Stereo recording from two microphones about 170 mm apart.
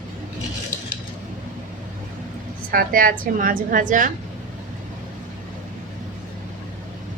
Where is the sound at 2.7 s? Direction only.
55° right (ahead or behind).